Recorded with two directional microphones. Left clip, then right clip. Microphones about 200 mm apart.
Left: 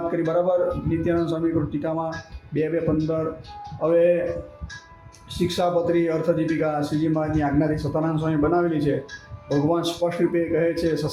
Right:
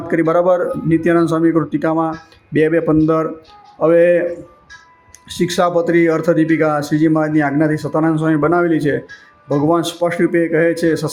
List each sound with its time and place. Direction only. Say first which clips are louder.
0.1 s a man's voice: right 10 dB; 30° right (ahead or behind)
5.3 s a man's voice: right 7 dB; 30° right (ahead or behind)